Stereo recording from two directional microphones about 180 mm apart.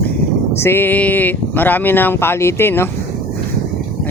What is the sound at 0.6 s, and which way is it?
Speech, 15° left (ahead or behind).